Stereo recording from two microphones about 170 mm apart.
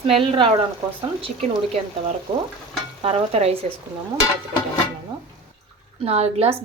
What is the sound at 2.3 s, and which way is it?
A woman's voice, 25° right (ahead or behind).